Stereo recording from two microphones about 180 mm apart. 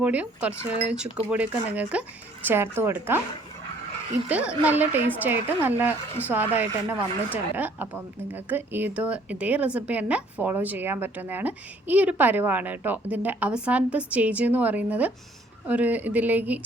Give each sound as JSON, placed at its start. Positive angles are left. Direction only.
{"t": 0.0, "sound": "a woman's voice", "side_deg": -10}
{"t": 4.3, "sound": "a woman's voice", "side_deg": -10}